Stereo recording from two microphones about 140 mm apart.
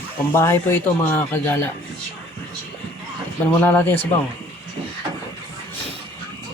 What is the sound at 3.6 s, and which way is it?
Speech, 10° left (ahead or behind).